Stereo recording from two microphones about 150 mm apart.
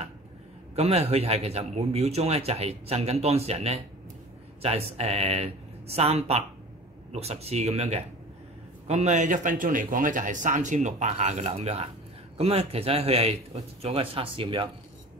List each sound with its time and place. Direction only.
0.7 s a man's voice: 40° right (ahead or behind)